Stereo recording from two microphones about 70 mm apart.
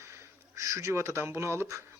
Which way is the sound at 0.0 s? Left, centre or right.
Right.